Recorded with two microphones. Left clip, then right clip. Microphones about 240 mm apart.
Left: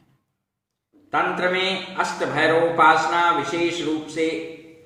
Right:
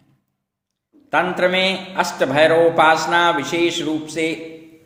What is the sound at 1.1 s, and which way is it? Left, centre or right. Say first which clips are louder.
A man's voice: right 4 dB; right.